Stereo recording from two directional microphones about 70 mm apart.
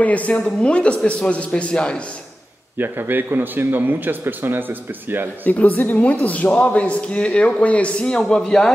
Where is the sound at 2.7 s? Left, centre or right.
Right.